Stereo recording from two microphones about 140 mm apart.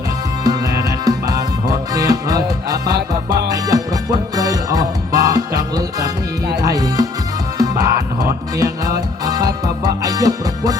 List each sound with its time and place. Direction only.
0.4 s music: 25° right (ahead or behind)